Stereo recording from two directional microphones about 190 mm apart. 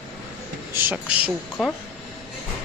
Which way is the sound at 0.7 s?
10° right (ahead or behind).